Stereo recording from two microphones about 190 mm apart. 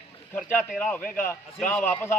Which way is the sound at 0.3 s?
10° left (ahead or behind).